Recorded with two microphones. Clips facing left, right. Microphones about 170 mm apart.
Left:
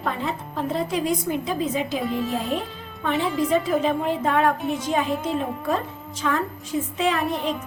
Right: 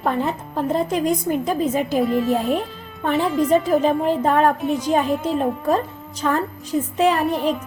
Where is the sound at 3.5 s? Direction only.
40° right (ahead or behind).